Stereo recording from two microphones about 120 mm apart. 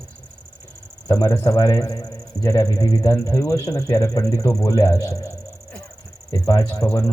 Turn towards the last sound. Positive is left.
turn(degrees=30)  # may be behind; listen again after turning